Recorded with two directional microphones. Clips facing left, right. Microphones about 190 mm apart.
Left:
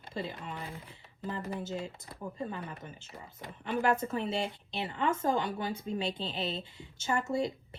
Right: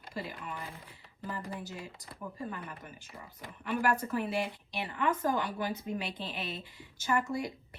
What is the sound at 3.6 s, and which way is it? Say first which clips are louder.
A woman's voice: left 1 dB; 25° left (ahead or behind).